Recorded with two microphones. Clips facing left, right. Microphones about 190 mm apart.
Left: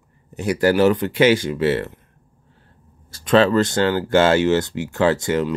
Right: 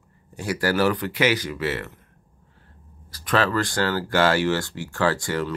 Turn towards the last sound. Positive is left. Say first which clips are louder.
# left 5 dB
turn(degrees=20)  # may be behind; listen again after turning